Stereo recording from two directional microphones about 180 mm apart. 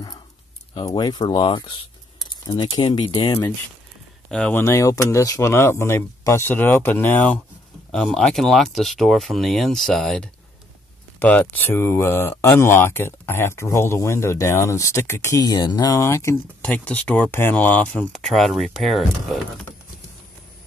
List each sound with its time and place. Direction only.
0.7 s speech: 20° left (ahead or behind)
4.3 s speech: 5° left (ahead or behind)